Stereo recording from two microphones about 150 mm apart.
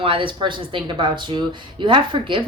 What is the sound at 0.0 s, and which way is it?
Speech, 35° right (ahead or behind).